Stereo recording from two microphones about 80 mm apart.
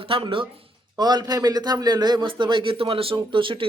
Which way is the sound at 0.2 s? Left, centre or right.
Right.